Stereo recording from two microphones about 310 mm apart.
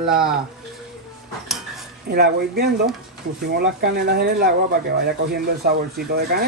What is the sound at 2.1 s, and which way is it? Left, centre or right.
Speech, right.